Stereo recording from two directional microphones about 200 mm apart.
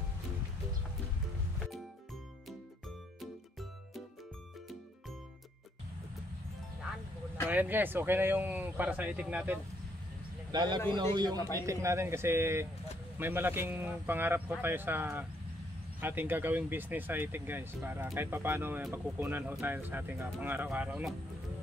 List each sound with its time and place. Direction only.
7.4 s speech: 10° right (ahead or behind)
10.5 s speech: 20° right (ahead or behind)
11.3 s a man's voice: 15° left (ahead or behind)
11.6 s speech: 15° right (ahead or behind)